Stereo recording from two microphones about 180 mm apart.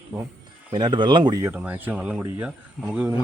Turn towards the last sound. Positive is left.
turn(degrees=-5)  # may be behind; listen again after turning